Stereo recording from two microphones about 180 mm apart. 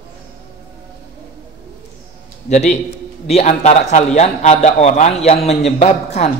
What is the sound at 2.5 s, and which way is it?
A man's voice, 40° left (ahead or behind).